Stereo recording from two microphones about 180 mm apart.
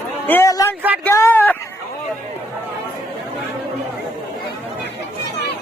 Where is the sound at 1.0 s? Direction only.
10° left (ahead or behind).